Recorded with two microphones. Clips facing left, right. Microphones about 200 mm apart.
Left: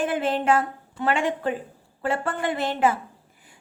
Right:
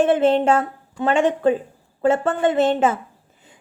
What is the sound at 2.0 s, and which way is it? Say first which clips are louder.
A woman's voice: right 8 dB; 25° right (ahead or behind).